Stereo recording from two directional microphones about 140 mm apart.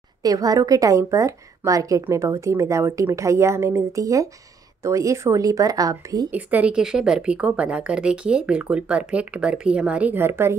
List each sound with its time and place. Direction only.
0.2 s a woman's voice: 25° right (ahead or behind)
6.3 s speech: 10° right (ahead or behind)